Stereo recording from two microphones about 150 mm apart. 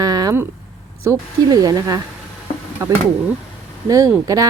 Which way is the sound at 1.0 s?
25° right (ahead or behind).